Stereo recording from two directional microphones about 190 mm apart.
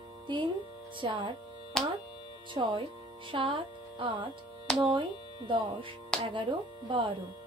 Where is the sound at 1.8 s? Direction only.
5° left (ahead or behind).